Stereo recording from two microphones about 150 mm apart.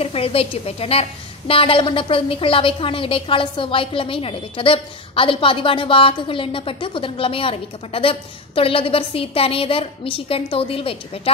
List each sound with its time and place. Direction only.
0.0 s a woman's voice: 40° left (ahead or behind)